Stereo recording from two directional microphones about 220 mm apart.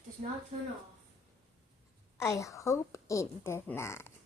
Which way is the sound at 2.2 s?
15° left (ahead or behind).